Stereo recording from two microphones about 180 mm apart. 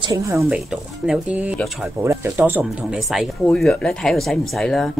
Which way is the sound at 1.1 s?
5° right (ahead or behind).